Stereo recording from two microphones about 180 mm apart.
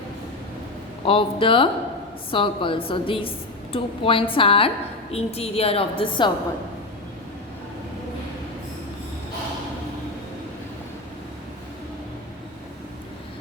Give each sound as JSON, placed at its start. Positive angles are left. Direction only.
{"t": 1.0, "sound": "a woman's voice", "side_deg": 30}